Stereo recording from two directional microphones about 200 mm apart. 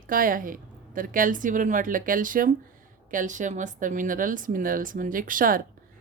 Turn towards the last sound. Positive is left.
turn(degrees=-45)  # may be behind; listen again after turning